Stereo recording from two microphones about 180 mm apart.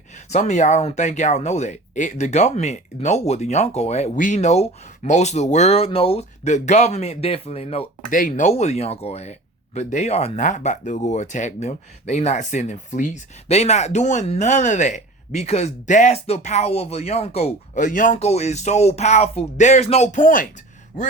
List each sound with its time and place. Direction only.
0.3 s speech: 40° left (ahead or behind)
8.1 s speech: 45° left (ahead or behind)